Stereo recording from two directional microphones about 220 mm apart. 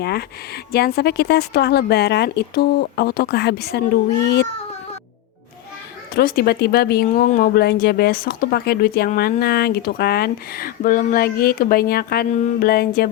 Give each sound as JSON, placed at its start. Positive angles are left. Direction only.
{"t": 0.0, "sound": "speech", "side_deg": 45}
{"t": 6.1, "sound": "speech", "side_deg": 45}